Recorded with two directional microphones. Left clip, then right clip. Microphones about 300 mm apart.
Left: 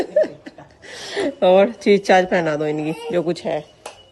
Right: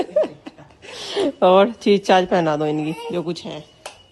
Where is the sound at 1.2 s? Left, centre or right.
Right.